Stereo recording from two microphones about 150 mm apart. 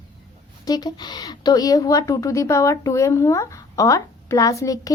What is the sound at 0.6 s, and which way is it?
A woman's voice, 25° left (ahead or behind).